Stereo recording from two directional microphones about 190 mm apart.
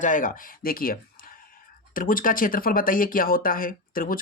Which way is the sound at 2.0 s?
45° left (ahead or behind).